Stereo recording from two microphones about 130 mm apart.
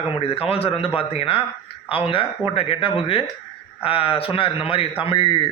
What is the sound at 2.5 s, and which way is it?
Speech, 45° left (ahead or behind).